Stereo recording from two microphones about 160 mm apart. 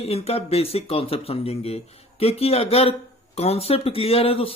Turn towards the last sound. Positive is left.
turn(degrees=35)  # may be behind; listen again after turning